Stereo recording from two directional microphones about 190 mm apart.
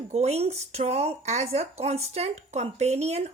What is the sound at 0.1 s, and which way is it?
Speech, 35° right (ahead or behind).